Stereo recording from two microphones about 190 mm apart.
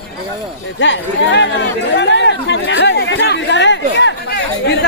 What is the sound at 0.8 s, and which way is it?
Chatter, 70° left (ahead or behind).